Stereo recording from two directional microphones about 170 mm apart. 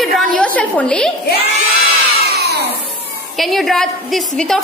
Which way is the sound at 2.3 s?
70° right (ahead or behind).